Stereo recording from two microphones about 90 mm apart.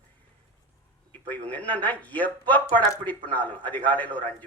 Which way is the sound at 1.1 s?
15° left (ahead or behind).